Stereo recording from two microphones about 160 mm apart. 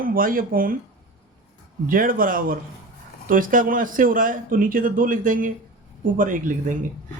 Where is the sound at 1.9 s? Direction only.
60° right (ahead or behind).